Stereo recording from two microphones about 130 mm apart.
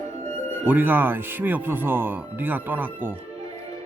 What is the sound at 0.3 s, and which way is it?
Music, 20° left (ahead or behind).